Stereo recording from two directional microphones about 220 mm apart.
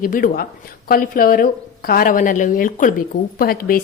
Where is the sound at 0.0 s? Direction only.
40° left (ahead or behind).